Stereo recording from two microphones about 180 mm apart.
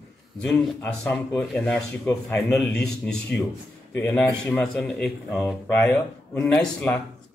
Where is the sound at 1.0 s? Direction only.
5° left (ahead or behind).